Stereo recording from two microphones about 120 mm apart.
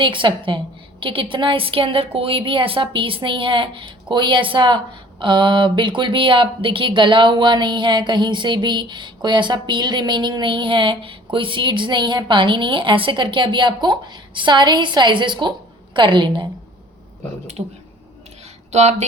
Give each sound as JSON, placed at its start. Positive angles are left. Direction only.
{"t": 0.0, "sound": "a woman's voice", "side_deg": -45}
{"t": 18.7, "sound": "speech", "side_deg": -70}